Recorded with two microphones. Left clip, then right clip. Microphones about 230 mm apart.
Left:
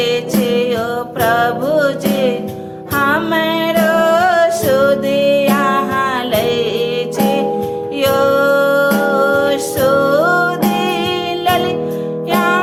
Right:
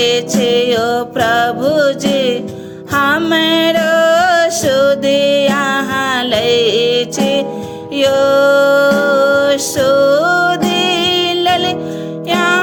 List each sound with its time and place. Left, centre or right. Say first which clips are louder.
0.0 s music: right 3 dB; right